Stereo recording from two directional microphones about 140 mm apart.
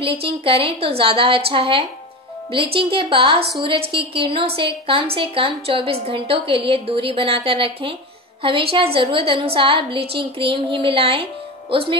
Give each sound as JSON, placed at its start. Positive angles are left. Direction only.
{"t": 0.0, "sound": "a woman's voice", "side_deg": -40}